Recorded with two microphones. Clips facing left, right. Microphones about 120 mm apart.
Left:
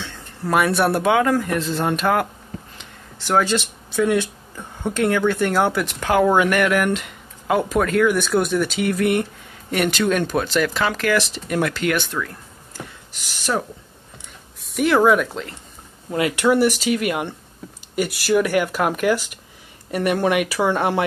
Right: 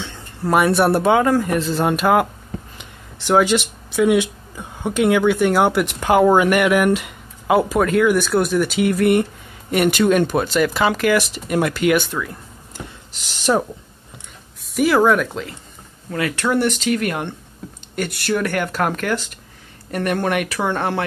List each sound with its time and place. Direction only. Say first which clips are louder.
0.5 s speech: right 3 dB; 5° right (ahead or behind)
12.7 s a sound: right 1 dB; 25° right (ahead or behind)
14.7 s speech: right 1 dB; centre (ahead or behind)
16.1 s speech: left 2 dB; 20° left (ahead or behind)
16.4 s speech: left 2 dB; 5° left (ahead or behind)